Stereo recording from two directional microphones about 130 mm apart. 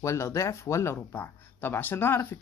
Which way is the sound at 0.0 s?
20° left (ahead or behind).